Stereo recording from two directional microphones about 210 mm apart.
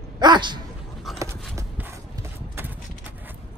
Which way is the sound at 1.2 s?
15° right (ahead or behind).